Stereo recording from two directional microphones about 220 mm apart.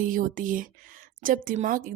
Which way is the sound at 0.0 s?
40° right (ahead or behind).